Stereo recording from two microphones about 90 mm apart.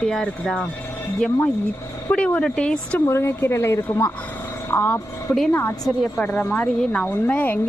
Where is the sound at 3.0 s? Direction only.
30° left (ahead or behind).